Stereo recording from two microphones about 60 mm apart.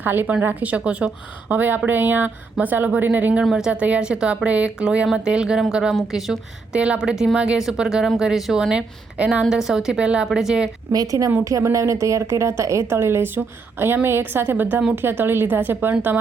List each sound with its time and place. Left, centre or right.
0.0 s a woman's voice: right
3.5 s a woman's voice: centre
6.7 s a woman's voice: centre
8.7 s a woman's voice: centre
10.9 s a woman's voice: right
11.4 s a woman's voice: right